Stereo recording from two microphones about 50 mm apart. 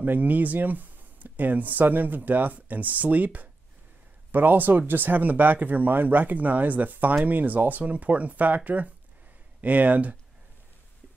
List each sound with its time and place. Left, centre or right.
0.0 s speech: right